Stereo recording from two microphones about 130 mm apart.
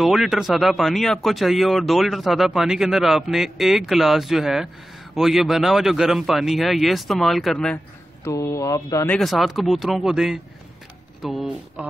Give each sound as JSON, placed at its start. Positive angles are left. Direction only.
{"t": 0.0, "sound": "speech", "side_deg": 0}
{"t": 8.2, "sound": "speech", "side_deg": 25}
{"t": 9.2, "sound": "speech", "side_deg": 0}